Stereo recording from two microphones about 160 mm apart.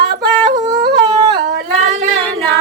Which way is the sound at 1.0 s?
25° right (ahead or behind).